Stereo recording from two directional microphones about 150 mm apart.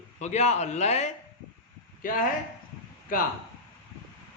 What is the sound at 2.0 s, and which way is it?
Speech, 65° left (ahead or behind).